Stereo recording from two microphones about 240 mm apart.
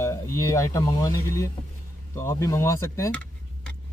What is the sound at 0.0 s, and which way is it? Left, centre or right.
Speech, centre.